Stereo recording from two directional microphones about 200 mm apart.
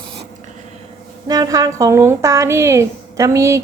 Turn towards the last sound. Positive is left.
turn(degrees=-15)  # may be behind; listen again after turning